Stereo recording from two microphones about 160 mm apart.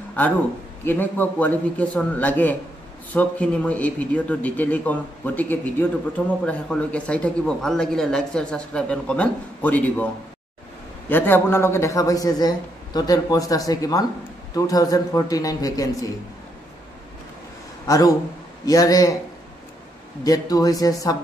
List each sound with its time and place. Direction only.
0.8 s a man's voice: 10° left (ahead or behind)
11.1 s a man's voice: 15° left (ahead or behind)
17.8 s a man's voice: 20° left (ahead or behind)
20.2 s a man's voice: 20° left (ahead or behind)